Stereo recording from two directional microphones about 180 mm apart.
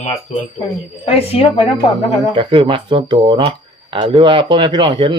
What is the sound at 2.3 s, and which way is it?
Speech, 30° right (ahead or behind).